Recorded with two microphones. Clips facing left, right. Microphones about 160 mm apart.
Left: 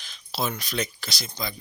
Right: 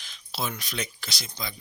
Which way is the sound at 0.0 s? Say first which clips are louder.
Left 4 dB; 40° left (ahead or behind).